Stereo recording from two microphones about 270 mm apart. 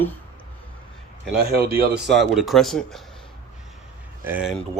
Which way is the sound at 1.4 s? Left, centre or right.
Right.